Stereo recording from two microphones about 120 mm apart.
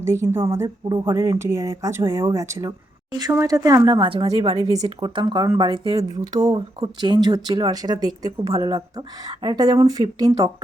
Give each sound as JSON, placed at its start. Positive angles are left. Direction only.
{"t": 0.0, "sound": "speech", "side_deg": -20}
{"t": 4.0, "sound": "speech", "side_deg": -45}